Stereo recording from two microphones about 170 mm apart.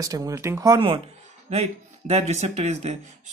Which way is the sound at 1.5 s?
40° right (ahead or behind).